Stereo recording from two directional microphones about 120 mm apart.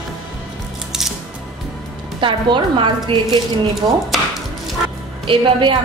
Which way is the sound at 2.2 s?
45° right (ahead or behind).